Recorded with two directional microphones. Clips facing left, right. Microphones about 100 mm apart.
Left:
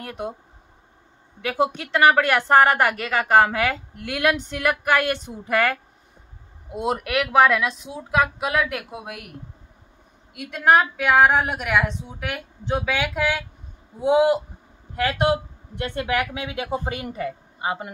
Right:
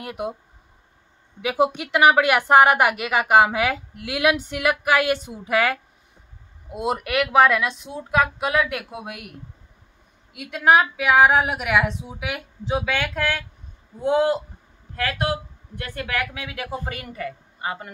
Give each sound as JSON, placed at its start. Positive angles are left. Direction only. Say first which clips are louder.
{"t": 0.0, "sound": "a woman's voice", "louder": "right 2 dB", "side_deg": -10}
{"t": 1.4, "sound": "a woman's voice", "louder": "right 2 dB", "side_deg": -10}
{"t": 15.0, "sound": "a man's voice", "louder": "left 4 dB", "side_deg": 25}